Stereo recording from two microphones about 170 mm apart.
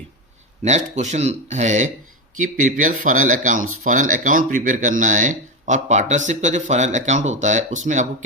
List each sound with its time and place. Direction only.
0.6 s speech: 45° right (ahead or behind)